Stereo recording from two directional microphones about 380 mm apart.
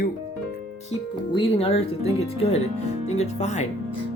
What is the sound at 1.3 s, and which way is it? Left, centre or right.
Speech, centre.